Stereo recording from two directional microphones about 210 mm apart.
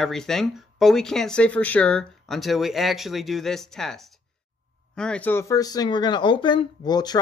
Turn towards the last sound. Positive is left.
turn(degrees=20)  # may be behind; listen again after turning